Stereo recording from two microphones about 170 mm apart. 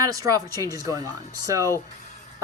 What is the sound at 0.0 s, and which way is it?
Speech, 20° right (ahead or behind).